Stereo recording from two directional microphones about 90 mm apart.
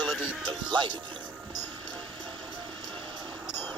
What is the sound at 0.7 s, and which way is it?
Speech, 60° right (ahead or behind).